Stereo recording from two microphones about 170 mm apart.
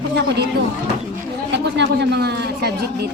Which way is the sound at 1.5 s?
90° right.